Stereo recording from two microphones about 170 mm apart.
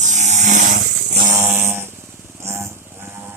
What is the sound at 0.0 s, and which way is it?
Chainsaw, 45° right (ahead or behind).